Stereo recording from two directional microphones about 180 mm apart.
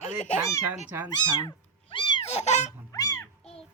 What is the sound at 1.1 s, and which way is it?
Cat, 25° left (ahead or behind).